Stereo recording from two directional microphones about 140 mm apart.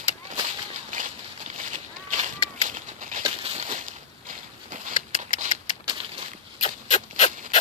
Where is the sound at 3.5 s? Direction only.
65° right (ahead or behind).